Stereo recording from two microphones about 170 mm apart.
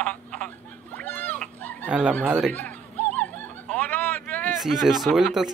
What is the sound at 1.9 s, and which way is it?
Speech, 5° right (ahead or behind).